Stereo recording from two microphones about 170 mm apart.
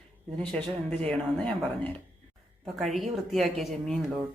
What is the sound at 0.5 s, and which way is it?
Speech, 5° left (ahead or behind).